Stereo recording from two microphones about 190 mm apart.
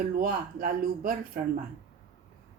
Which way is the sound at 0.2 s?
50° right (ahead or behind).